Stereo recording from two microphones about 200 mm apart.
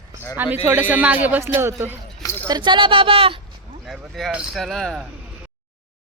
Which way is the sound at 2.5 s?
25° right (ahead or behind).